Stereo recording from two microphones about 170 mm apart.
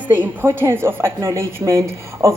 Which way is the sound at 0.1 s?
10° right (ahead or behind).